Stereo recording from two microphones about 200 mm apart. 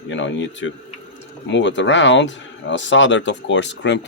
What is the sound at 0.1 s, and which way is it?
Speech, 65° left (ahead or behind).